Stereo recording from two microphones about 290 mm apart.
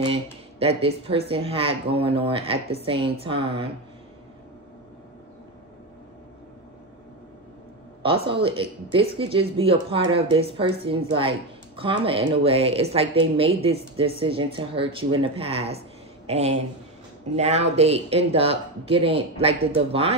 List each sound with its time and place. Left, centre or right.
0.0 s speech: centre
8.0 s speech: centre